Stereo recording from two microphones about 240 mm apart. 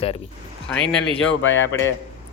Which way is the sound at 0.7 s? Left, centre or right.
Centre.